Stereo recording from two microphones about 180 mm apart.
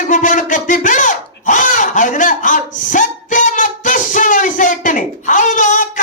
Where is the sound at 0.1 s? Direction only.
45° left (ahead or behind).